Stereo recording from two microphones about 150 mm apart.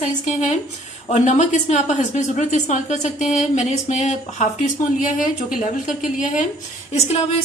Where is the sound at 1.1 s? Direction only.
50° left (ahead or behind).